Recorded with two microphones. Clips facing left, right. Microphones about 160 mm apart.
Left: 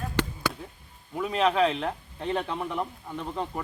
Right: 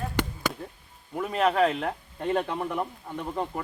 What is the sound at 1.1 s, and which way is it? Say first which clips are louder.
Speech: even; 5° right (ahead or behind).